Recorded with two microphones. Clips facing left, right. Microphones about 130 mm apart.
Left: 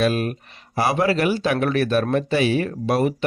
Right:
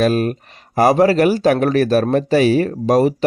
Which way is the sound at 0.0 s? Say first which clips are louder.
Right 5 dB; 40° right (ahead or behind).